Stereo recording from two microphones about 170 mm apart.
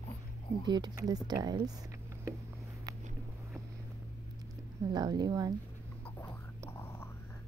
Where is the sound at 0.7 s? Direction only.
25° right (ahead or behind).